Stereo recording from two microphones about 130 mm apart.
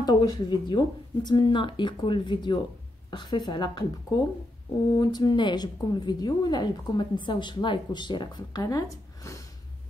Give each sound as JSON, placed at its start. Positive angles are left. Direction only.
{"t": 0.0, "sound": "a woman's voice", "side_deg": 30}